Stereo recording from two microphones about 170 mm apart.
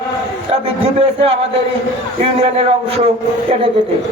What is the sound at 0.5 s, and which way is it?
A man's voice, 35° right (ahead or behind).